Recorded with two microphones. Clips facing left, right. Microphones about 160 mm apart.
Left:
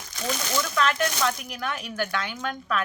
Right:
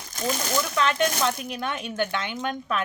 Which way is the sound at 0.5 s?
25° right (ahead or behind).